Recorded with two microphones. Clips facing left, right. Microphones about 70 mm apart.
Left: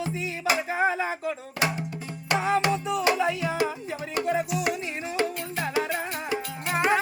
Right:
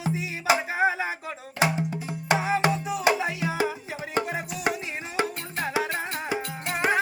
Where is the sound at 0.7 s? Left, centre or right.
Centre.